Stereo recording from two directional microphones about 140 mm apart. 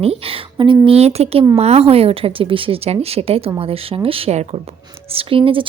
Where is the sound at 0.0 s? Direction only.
45° right (ahead or behind).